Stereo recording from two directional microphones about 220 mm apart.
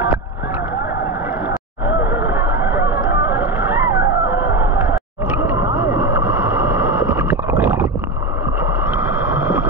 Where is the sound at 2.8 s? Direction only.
10° right (ahead or behind).